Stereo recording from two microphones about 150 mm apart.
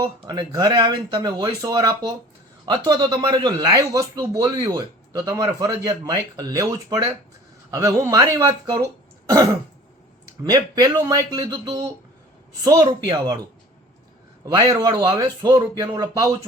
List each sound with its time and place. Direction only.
0.0 s speech: 25° right (ahead or behind)
14.4 s speech: 25° right (ahead or behind)